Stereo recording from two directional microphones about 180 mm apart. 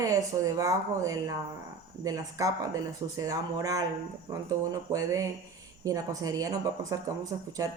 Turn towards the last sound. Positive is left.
turn(degrees=-20)  # may be behind; listen again after turning